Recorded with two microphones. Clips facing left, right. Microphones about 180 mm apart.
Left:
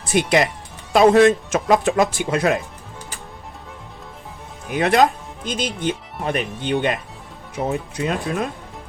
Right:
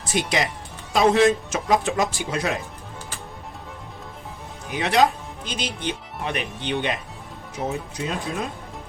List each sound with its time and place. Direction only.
0.1 s speech: 55° left (ahead or behind)
4.7 s speech: 50° left (ahead or behind)
7.7 s speech: 60° left (ahead or behind)